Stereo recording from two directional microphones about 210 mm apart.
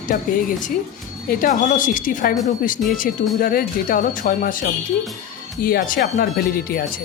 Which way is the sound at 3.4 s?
40° left (ahead or behind).